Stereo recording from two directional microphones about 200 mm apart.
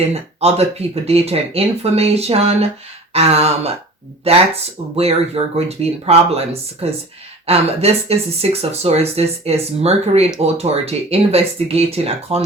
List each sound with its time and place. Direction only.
0.1 s speech: 30° right (ahead or behind)